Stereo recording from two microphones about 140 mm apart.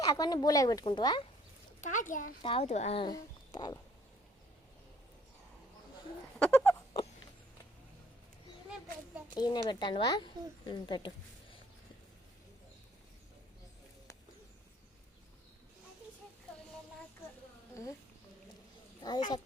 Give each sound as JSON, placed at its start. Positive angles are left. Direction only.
{"t": 0.0, "sound": "a woman's voice", "side_deg": 30}
{"t": 1.8, "sound": "a child's voice", "side_deg": 65}
{"t": 2.4, "sound": "speech", "side_deg": 40}
{"t": 2.6, "sound": "speech", "side_deg": 50}
{"t": 3.0, "sound": "speech", "side_deg": 30}
{"t": 6.4, "sound": "a sound", "side_deg": 15}
{"t": 9.3, "sound": "speech", "side_deg": 30}
{"t": 19.0, "sound": "speech", "side_deg": 30}